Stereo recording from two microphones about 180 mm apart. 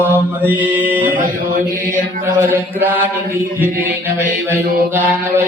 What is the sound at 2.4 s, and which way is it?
Mantra, 10° right (ahead or behind).